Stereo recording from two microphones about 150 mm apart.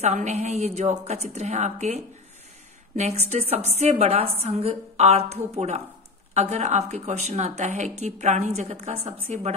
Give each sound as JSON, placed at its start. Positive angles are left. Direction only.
{"t": 0.0, "sound": "a woman's voice", "side_deg": -50}